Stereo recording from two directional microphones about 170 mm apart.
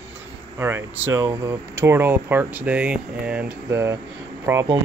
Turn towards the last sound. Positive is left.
turn(degrees=-15)  # may be behind; listen again after turning